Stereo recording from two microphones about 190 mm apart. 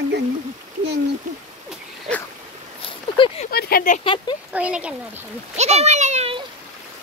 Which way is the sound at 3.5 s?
55° left (ahead or behind).